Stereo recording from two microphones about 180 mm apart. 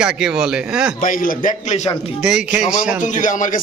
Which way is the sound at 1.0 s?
50° left (ahead or behind).